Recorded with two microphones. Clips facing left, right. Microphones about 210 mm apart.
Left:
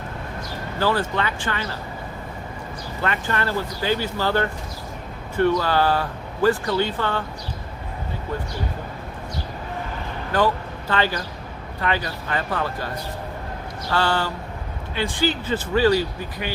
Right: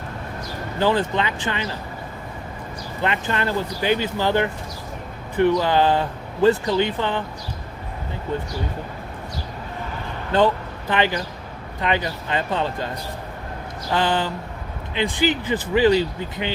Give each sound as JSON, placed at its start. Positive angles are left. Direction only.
{"t": 0.8, "sound": "speech", "side_deg": -20}
{"t": 3.0, "sound": "speech", "side_deg": -20}
{"t": 10.3, "sound": "speech", "side_deg": -20}
{"t": 13.9, "sound": "speech", "side_deg": -20}